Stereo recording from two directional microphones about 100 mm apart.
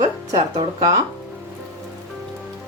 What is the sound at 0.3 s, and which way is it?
Speech, 45° right (ahead or behind).